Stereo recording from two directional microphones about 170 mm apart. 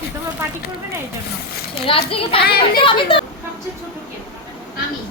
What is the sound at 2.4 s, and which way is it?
Speech, 65° left (ahead or behind).